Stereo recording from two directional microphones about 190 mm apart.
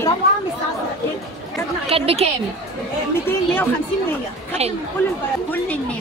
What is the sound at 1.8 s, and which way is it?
Speech, 30° right (ahead or behind).